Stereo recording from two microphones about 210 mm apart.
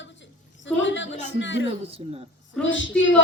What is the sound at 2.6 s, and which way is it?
Speech, 65° left (ahead or behind).